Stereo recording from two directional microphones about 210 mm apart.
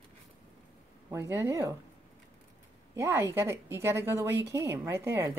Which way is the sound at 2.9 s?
10° right (ahead or behind).